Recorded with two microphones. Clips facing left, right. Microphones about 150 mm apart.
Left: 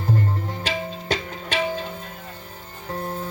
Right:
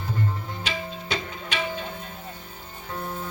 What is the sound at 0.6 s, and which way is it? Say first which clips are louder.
Music: left 4 dB; 40° left (ahead or behind).